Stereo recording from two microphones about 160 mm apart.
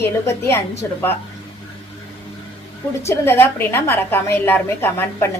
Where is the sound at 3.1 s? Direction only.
15° left (ahead or behind).